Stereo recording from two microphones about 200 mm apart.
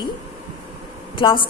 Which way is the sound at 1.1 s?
25° left (ahead or behind).